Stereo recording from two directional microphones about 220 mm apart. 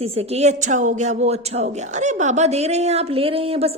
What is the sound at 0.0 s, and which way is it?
A woman's voice, 30° right (ahead or behind).